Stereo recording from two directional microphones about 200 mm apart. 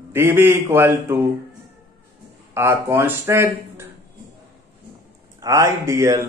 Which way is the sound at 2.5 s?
15° right (ahead or behind).